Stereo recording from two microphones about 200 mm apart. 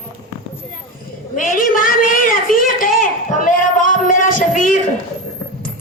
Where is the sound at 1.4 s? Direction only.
45° left (ahead or behind).